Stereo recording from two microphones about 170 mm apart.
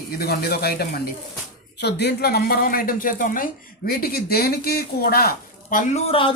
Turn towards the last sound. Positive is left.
turn(degrees=50)  # may be behind; listen again after turning